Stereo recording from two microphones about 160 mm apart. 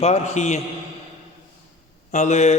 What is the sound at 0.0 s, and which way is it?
Speech, 45° left (ahead or behind).